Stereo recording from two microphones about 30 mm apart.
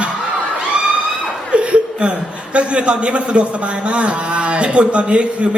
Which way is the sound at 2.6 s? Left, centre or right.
Right.